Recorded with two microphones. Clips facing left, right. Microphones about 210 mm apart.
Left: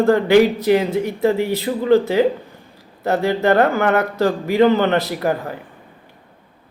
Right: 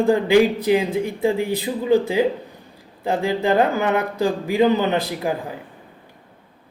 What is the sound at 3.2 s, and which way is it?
Speech, 70° left (ahead or behind).